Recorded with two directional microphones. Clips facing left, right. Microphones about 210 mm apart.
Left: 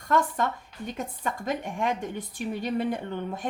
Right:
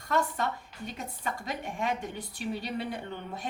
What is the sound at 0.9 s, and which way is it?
A woman's voice, 50° left (ahead or behind).